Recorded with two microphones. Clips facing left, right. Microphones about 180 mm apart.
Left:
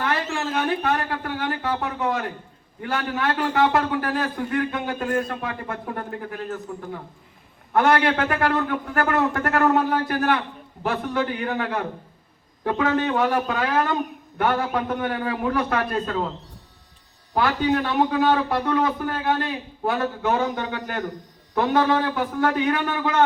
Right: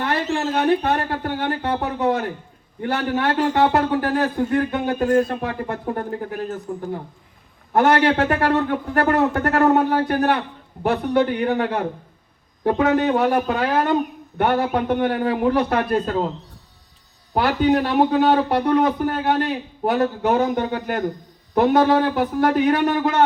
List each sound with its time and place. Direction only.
0.0 s a man's voice: 35° right (ahead or behind)
17.3 s a man's voice: 35° right (ahead or behind)